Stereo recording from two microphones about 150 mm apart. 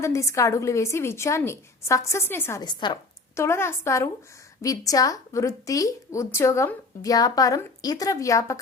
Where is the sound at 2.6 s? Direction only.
30° left (ahead or behind).